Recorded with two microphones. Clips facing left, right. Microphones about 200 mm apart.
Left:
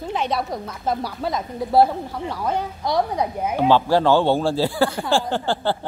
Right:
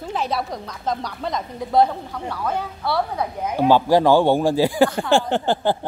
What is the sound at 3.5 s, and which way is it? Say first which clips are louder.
Speech: right 2 dB; 10° right (ahead or behind).